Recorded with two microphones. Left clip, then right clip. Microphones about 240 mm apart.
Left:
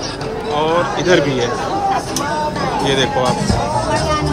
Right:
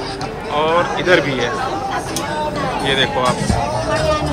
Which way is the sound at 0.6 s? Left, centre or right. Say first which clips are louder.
Right 1 dB; centre.